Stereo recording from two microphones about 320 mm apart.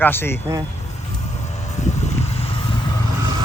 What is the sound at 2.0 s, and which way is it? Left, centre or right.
Vehicle, centre.